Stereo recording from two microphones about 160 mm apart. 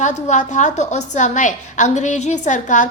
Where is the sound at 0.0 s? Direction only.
50° left (ahead or behind).